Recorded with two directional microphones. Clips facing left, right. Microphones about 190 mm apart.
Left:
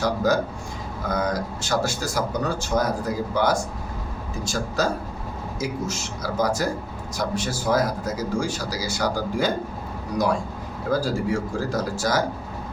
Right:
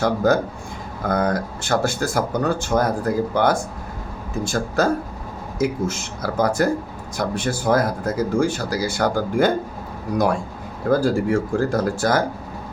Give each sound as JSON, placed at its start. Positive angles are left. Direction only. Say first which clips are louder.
{"t": 0.0, "sound": "speech", "louder": "right 3 dB", "side_deg": -55}
{"t": 10.8, "sound": "speech", "louder": "right 5 dB", "side_deg": -55}